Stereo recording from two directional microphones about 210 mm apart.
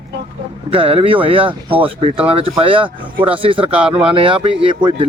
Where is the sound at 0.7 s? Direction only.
25° right (ahead or behind).